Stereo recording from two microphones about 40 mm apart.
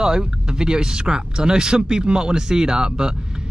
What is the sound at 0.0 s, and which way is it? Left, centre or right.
Speech, centre.